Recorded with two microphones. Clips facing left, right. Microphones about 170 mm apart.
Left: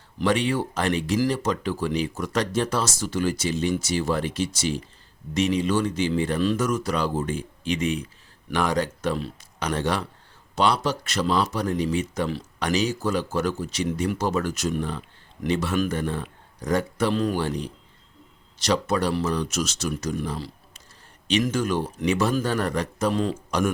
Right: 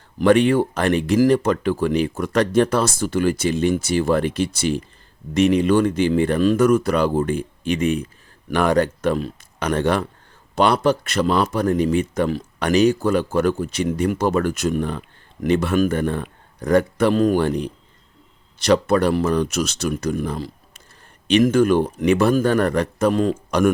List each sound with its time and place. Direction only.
0.2 s speech: 55° right (ahead or behind)